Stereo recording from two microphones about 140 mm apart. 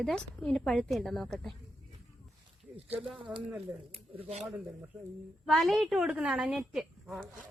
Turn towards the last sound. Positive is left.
turn(degrees=-5)  # may be behind; listen again after turning